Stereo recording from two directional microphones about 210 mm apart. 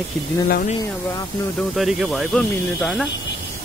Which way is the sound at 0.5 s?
40° left (ahead or behind).